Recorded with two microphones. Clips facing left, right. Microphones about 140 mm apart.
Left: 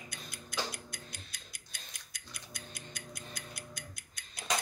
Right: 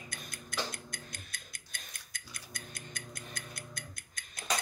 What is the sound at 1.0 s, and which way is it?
Music, 50° right (ahead or behind).